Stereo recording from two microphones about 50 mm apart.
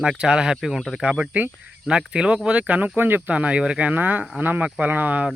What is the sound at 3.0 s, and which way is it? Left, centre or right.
Speech, right.